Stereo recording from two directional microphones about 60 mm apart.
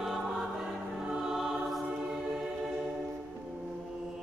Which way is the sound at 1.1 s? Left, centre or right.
Centre.